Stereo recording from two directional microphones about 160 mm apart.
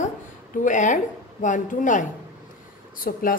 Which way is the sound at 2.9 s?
60° left (ahead or behind).